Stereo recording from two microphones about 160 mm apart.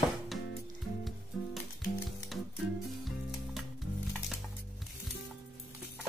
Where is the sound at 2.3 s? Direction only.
Centre (ahead or behind).